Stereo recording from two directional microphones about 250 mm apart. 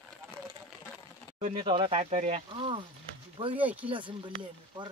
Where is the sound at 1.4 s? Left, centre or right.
Right.